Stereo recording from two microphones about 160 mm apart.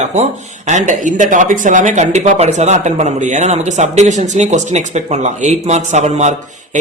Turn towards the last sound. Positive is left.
turn(degrees=-45)  # may be behind; listen again after turning